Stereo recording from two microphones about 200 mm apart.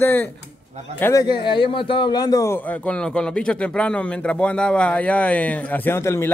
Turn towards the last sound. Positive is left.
turn(degrees=10)  # may be behind; listen again after turning